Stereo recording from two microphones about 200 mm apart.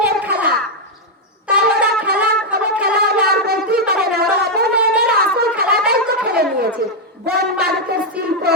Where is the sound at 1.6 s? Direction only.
50° right (ahead or behind).